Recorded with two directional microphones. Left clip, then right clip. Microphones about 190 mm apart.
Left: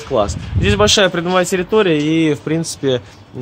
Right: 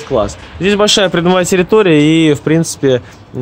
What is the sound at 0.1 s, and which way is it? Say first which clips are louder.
Speech: right 2 dB; centre (ahead or behind).